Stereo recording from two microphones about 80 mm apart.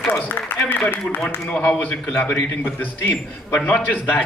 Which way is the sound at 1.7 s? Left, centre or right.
Left.